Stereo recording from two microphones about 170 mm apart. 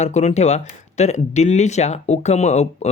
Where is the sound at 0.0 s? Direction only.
40° left (ahead or behind).